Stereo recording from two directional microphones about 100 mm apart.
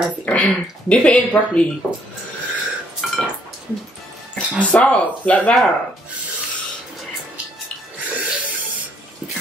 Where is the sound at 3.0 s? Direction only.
Centre (ahead or behind).